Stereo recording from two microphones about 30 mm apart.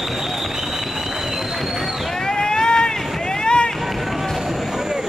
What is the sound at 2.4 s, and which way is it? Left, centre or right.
Run, left.